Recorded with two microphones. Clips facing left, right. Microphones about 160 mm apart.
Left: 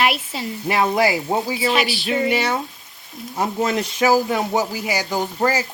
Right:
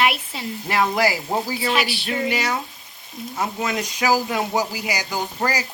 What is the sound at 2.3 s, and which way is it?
Speech, 30° left (ahead or behind).